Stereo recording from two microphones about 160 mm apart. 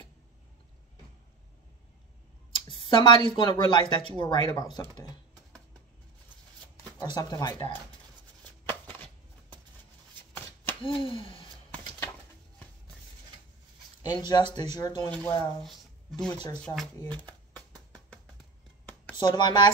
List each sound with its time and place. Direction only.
2.5 s speech: 30° left (ahead or behind)
7.2 s speech: 25° left (ahead or behind)
10.3 s shuffling cards: 15° left (ahead or behind)
10.8 s speech: 35° left (ahead or behind)
11.7 s bird: 10° left (ahead or behind)
14.0 s speech: 25° left (ahead or behind)
15.0 s speech: 10° left (ahead or behind)
15.6 s music: centre (ahead or behind)
16.6 s speech: 5° left (ahead or behind)
19.1 s speech: 30° left (ahead or behind)